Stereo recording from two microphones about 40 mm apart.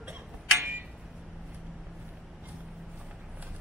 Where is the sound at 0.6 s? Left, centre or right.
Right.